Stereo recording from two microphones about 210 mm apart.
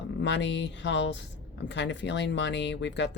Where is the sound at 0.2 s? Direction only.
55° left (ahead or behind).